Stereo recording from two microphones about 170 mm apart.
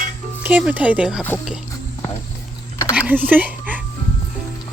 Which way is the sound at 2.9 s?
10° right (ahead or behind).